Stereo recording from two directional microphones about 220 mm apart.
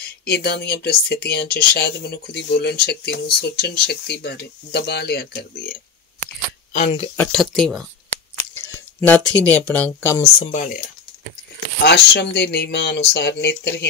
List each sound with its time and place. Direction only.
0.0 s speech: 45° left (ahead or behind)
6.7 s speech: 30° left (ahead or behind)
7.2 s speech: centre (ahead or behind)
10.4 s speech: 30° left (ahead or behind)
11.8 s speech: 50° left (ahead or behind)